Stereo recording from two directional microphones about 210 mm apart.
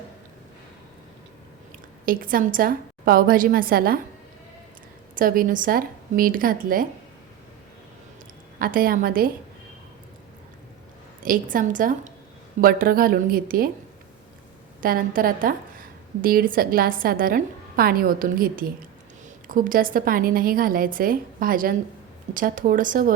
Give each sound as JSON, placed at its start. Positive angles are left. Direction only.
{"t": 2.0, "sound": "a woman's voice", "side_deg": -40}
{"t": 5.1, "sound": "a woman's voice", "side_deg": -40}
{"t": 8.5, "sound": "a woman's voice", "side_deg": -45}
{"t": 11.2, "sound": "a woman's voice", "side_deg": -40}
{"t": 14.8, "sound": "a woman's voice", "side_deg": -45}